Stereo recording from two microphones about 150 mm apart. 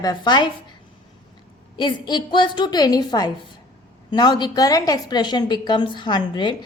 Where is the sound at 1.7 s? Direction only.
30° left (ahead or behind).